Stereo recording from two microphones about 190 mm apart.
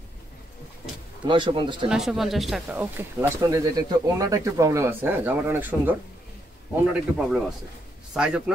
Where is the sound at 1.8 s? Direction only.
Centre (ahead or behind).